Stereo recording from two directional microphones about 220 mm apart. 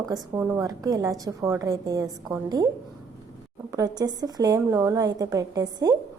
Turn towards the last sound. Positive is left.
turn(degrees=-20)  # may be behind; listen again after turning